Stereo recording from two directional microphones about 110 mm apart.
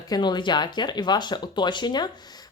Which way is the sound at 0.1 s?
40° left (ahead or behind).